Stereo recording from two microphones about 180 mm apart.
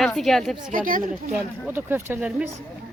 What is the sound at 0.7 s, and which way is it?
Speech, 50° right (ahead or behind).